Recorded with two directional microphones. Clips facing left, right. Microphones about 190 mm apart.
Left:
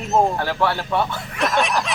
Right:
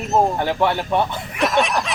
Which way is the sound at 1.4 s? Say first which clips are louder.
Right 2 dB; centre (ahead or behind).